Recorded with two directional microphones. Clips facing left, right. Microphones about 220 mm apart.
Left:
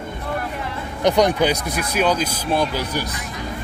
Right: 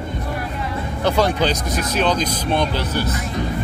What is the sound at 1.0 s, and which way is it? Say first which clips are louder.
Speech: left 2 dB; 15° left (ahead or behind).